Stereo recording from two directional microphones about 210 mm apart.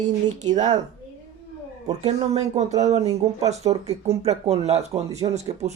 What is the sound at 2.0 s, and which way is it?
Speech, 30° right (ahead or behind).